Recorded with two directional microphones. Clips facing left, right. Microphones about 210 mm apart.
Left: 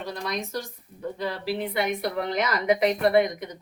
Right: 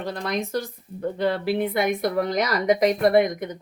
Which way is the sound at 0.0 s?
55° right (ahead or behind).